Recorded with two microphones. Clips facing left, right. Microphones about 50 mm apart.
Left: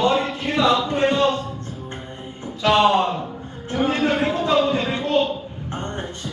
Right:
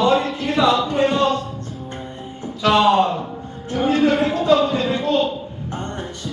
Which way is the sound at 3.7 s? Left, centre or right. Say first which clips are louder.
Right 3 dB; left.